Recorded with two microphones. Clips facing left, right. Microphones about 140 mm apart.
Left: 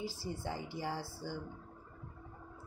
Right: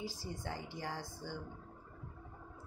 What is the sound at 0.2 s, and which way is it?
Speech, 10° left (ahead or behind).